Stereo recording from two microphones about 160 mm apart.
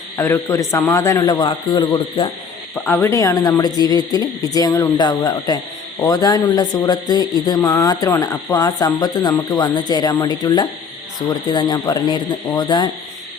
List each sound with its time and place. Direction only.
0.2 s speech: 20° left (ahead or behind)
2.7 s speech: 15° left (ahead or behind)